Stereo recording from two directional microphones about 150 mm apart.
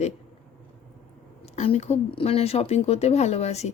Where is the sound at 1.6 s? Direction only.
50° left (ahead or behind).